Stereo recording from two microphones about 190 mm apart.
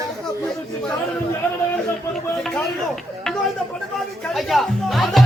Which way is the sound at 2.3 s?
Centre (ahead or behind).